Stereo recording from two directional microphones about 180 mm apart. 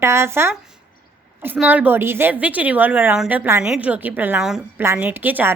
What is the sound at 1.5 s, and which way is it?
A woman's voice, 10° right (ahead or behind).